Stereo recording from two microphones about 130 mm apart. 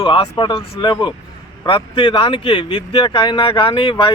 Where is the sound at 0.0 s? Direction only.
40° left (ahead or behind).